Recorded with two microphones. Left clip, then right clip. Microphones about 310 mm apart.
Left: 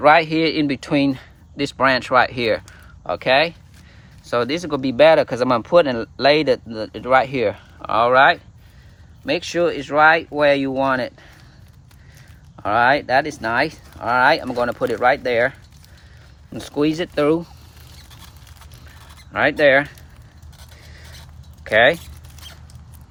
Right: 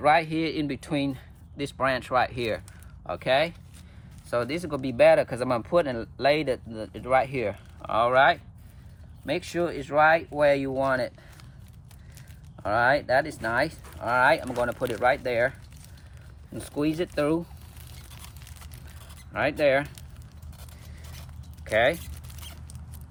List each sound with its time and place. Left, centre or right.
0.0 s speech: left
12.5 s speech: left
16.6 s speech: left
19.3 s speech: left
21.6 s speech: left